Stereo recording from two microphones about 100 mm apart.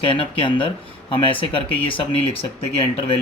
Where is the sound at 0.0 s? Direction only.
60° left (ahead or behind).